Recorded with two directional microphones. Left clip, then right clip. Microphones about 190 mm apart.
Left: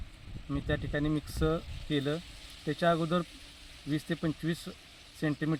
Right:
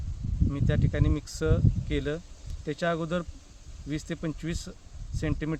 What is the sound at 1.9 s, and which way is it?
Speech, 30° right (ahead or behind).